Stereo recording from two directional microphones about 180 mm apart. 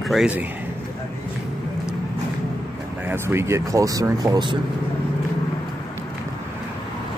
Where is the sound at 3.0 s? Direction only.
15° right (ahead or behind).